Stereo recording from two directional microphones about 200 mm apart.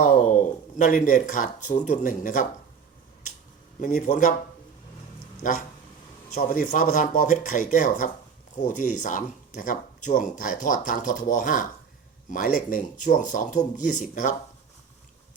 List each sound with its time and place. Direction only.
0.0 s speech: 40° left (ahead or behind)
3.8 s speech: 40° left (ahead or behind)
5.4 s speech: 40° left (ahead or behind)